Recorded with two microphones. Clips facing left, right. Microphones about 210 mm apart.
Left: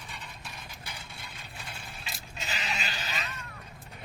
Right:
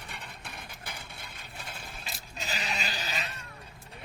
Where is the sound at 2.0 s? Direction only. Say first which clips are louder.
Right 1 dB; 35° right (ahead or behind).